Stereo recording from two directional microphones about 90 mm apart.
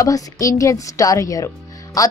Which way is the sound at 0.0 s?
40° left (ahead or behind).